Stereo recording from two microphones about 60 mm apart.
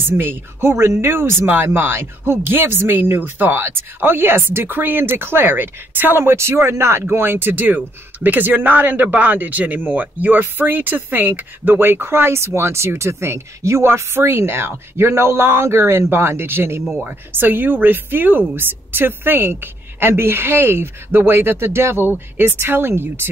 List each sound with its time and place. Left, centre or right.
0.2 s speech: right
7.1 s speech: right